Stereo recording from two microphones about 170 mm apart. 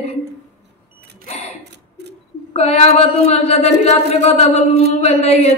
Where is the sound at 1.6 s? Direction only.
80° right.